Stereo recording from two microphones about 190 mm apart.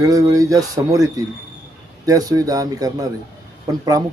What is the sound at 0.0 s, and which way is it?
A man's voice, 20° right (ahead or behind).